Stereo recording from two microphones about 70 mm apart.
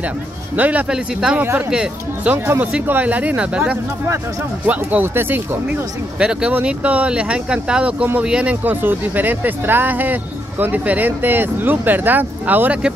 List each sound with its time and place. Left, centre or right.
0.6 s speech: right
0.8 s speech: centre
2.3 s speech: right
5.0 s speech: right
6.1 s speech: centre